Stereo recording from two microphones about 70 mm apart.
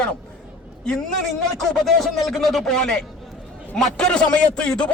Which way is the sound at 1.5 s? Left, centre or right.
Centre.